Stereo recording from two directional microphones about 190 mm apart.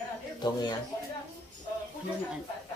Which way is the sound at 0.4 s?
25° left (ahead or behind).